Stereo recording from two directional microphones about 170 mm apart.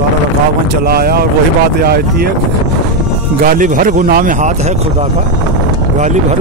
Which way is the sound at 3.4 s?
55° right (ahead or behind).